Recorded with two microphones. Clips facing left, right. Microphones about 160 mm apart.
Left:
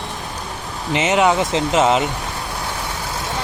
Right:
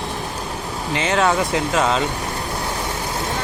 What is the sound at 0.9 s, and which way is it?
Speech, 20° left (ahead or behind).